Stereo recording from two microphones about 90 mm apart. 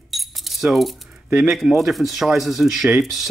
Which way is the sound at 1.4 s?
5° right (ahead or behind).